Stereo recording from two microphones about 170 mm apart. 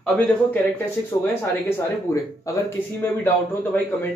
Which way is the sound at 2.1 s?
15° left (ahead or behind).